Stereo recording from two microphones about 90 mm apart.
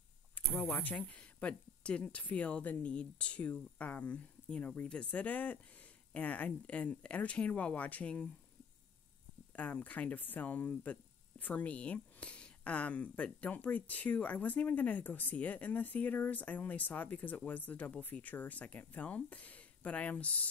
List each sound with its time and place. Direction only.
0.5 s speech: 20° left (ahead or behind)
9.6 s speech: 15° left (ahead or behind)